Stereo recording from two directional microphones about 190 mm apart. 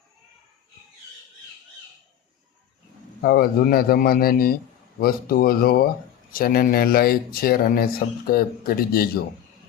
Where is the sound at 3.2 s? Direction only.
50° left (ahead or behind).